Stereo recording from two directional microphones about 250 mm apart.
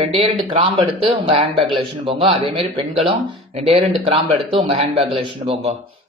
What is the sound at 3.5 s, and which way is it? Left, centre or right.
Speech, right.